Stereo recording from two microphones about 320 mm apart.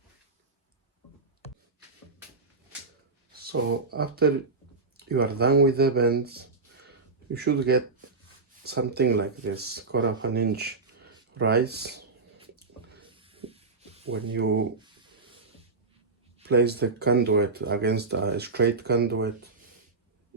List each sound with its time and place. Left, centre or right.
3.4 s speech: right
13.1 s rub: centre
14.1 s speech: right
16.4 s speech: right